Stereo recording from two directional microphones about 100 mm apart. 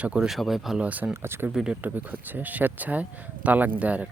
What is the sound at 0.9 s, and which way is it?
Speech, 15° right (ahead or behind).